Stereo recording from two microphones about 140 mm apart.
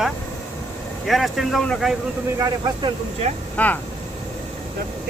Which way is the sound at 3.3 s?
50° right (ahead or behind).